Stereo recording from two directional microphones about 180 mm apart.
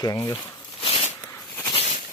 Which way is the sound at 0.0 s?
15° left (ahead or behind).